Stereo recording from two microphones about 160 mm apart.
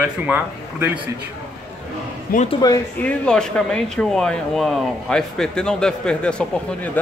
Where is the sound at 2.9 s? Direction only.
5° left (ahead or behind).